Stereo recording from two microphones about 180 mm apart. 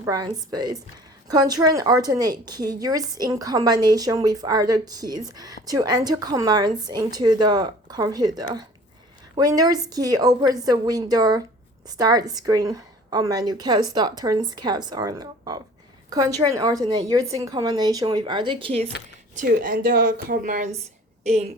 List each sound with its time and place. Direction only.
0.0 s a woman's voice: 20° right (ahead or behind)
19.4 s a woman's voice: 50° right (ahead or behind)
21.2 s speech: 35° right (ahead or behind)